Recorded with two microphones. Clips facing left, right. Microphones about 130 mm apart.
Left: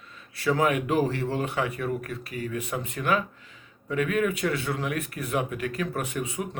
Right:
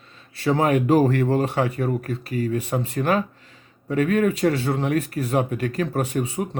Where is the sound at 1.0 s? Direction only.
50° right (ahead or behind).